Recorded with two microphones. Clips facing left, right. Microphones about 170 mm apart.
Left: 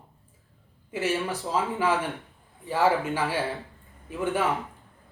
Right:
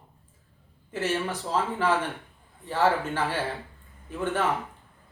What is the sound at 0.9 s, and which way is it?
Speech, 10° left (ahead or behind).